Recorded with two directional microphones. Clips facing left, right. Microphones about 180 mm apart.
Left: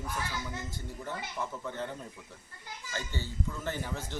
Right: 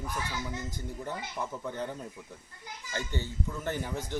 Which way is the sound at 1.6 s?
15° right (ahead or behind).